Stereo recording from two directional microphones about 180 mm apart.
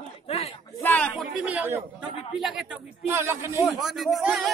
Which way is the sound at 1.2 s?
5° right (ahead or behind).